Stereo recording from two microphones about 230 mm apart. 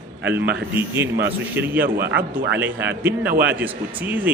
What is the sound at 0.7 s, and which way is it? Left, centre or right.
Speech, centre.